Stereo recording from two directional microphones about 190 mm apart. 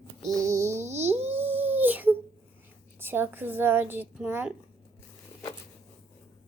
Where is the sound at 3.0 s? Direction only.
10° right (ahead or behind).